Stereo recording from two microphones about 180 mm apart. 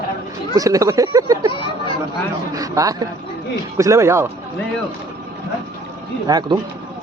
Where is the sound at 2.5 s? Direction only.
20° right (ahead or behind).